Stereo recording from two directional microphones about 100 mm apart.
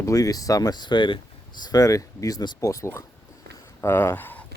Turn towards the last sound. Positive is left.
turn(degrees=20)  # may be behind; listen again after turning